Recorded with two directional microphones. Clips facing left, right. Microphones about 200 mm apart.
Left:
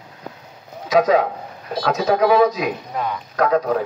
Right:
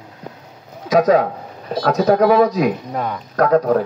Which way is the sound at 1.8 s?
55° right (ahead or behind).